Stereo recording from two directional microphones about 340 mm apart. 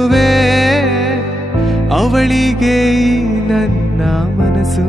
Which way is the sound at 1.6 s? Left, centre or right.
Centre.